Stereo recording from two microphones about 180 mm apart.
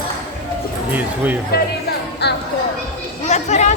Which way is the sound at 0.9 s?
10° right (ahead or behind).